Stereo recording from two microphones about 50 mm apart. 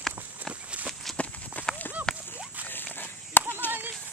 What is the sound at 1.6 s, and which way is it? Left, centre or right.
Clip-clop, left.